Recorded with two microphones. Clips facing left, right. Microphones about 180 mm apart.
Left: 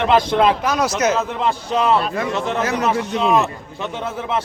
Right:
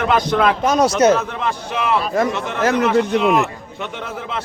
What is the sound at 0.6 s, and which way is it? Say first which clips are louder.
Speech: right 5 dB; 30° right (ahead or behind).